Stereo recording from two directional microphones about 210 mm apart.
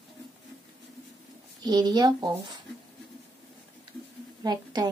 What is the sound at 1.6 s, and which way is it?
Speech, 20° right (ahead or behind).